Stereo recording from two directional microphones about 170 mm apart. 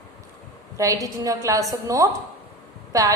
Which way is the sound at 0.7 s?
20° right (ahead or behind).